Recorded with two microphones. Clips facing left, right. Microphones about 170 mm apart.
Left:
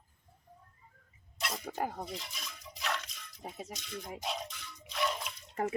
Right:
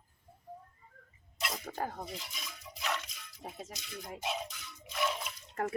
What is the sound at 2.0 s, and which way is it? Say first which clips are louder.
Music: left 1 dB; centre (ahead or behind).